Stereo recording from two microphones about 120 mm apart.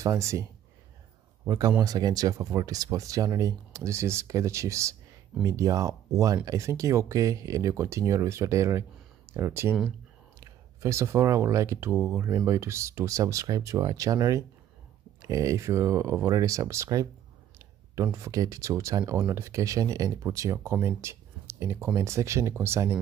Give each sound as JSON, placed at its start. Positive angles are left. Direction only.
{"t": 0.0, "sound": "speech", "side_deg": -25}
{"t": 1.8, "sound": "speech", "side_deg": -35}